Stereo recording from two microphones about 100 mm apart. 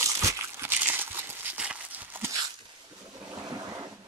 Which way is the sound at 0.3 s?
20° right (ahead or behind).